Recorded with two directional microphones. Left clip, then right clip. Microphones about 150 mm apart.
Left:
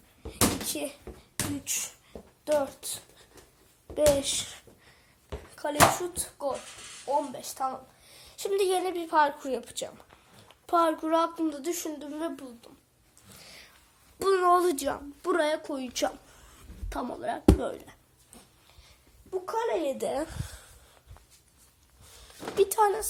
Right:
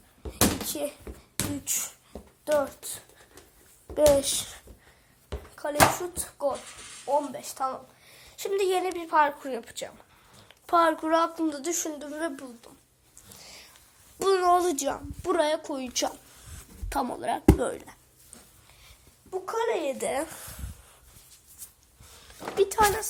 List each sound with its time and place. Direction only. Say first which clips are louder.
0.6 s a child's voice: right 2 dB; centre (ahead or behind)
3.9 s a woman's voice: right 3 dB; 5° right (ahead or behind)
5.3 s a sound: right 1 dB; 75° right (ahead or behind)
6.1 s a woman's voice: right 3 dB; centre (ahead or behind)
8.2 s a woman's voice: even; 15° left (ahead or behind)
9.2 s a woman's voice: even; 25° left (ahead or behind)
10.3 s a woman's voice: right 2 dB; 10° left (ahead or behind)
13.2 s whispering: right 1 dB; 15° left (ahead or behind)
14.2 s speech: right 1 dB; centre (ahead or behind)
14.6 s a woman's voice: even; 15° left (ahead or behind)
16.5 s speech: right 6 dB; 5° right (ahead or behind)
19.3 s a child's voice: right 2 dB; 20° right (ahead or behind)
19.8 s speech: right 1 dB; 20° left (ahead or behind)
22.0 s a sound: right 2 dB; 20° left (ahead or behind)